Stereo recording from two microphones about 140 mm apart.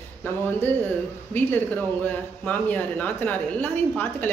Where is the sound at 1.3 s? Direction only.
15° left (ahead or behind).